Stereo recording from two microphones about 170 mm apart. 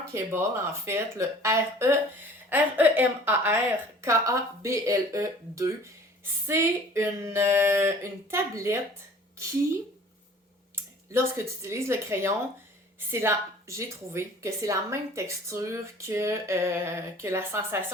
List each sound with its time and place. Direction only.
0.1 s a woman's voice: 15° right (ahead or behind)
11.1 s a woman's voice: 15° right (ahead or behind)